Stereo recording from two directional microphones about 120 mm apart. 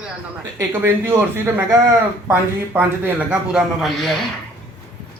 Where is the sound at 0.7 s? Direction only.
15° right (ahead or behind).